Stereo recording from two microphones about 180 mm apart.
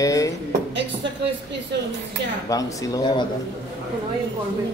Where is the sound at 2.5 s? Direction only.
20° left (ahead or behind).